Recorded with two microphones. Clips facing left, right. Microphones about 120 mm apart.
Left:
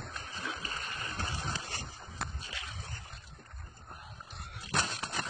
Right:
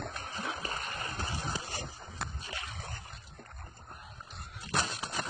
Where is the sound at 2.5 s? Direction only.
55° right (ahead or behind).